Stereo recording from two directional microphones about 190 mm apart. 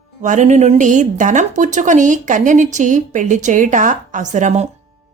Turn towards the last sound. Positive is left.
turn(degrees=-40)  # may be behind; listen again after turning